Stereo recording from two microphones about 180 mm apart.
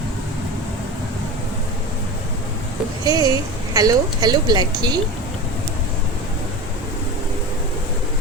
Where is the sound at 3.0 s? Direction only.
20° right (ahead or behind).